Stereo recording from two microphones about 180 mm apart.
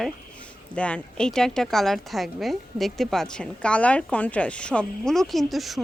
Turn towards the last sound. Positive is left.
turn(degrees=0)  # may be behind; listen again after turning